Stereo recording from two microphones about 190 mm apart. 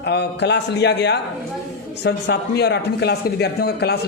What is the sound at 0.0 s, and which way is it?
Speech, 60° left (ahead or behind).